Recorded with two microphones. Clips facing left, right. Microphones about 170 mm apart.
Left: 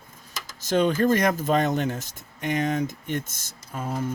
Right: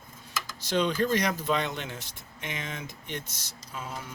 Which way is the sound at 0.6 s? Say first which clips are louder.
Left 6 dB; 50° left (ahead or behind).